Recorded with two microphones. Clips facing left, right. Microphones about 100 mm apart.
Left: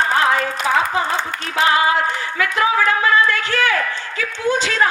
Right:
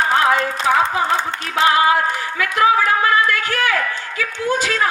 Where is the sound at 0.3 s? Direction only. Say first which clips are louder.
Right 2 dB; 30° right (ahead or behind).